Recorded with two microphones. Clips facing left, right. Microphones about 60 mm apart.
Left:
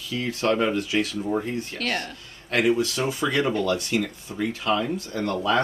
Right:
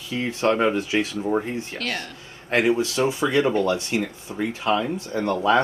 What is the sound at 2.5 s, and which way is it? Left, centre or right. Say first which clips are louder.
Speech: right 1 dB; right.